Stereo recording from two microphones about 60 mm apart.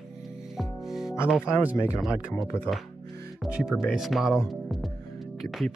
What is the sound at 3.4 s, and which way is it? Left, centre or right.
Speech, centre.